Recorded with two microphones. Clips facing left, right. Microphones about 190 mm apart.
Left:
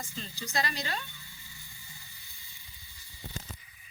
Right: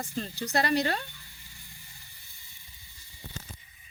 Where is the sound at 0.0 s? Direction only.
65° right (ahead or behind).